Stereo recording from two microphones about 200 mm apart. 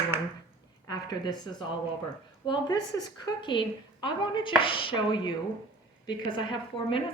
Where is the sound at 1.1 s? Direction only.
20° left (ahead or behind).